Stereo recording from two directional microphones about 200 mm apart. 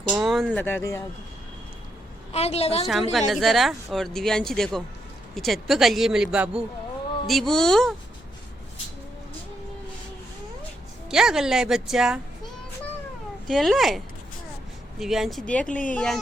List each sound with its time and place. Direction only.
0.1 s speech: centre (ahead or behind)
0.6 s speech: 10° left (ahead or behind)
2.3 s a woman's voice: 30° left (ahead or behind)
2.8 s speech: centre (ahead or behind)
11.1 s speech: centre (ahead or behind)
13.5 s speech: centre (ahead or behind)